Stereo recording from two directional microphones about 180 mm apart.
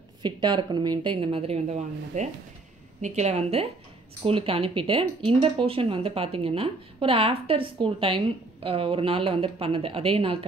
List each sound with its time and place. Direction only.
0.2 s a woman's voice: 25° right (ahead or behind)